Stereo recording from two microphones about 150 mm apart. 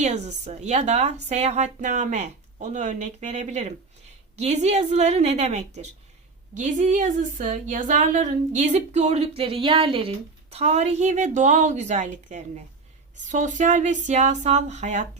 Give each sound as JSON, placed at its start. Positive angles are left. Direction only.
{"t": 0.0, "sound": "speech", "side_deg": -50}